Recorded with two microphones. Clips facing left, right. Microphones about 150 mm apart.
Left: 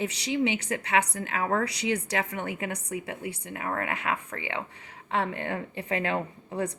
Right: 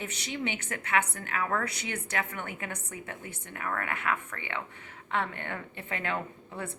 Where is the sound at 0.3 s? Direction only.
15° left (ahead or behind).